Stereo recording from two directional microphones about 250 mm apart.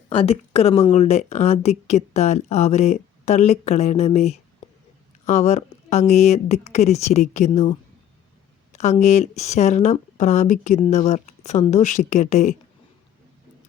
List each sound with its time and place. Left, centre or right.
0.1 s speech: left